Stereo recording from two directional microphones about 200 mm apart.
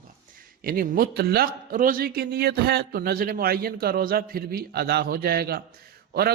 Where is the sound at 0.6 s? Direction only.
45° right (ahead or behind).